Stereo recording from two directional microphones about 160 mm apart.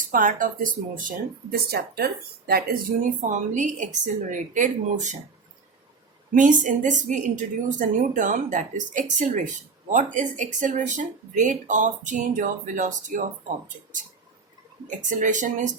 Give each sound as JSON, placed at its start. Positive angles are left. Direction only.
{"t": 0.1, "sound": "speech", "side_deg": -60}
{"t": 3.2, "sound": "a woman's voice", "side_deg": -50}
{"t": 6.3, "sound": "a woman's voice", "side_deg": -55}
{"t": 14.8, "sound": "a woman's voice", "side_deg": -50}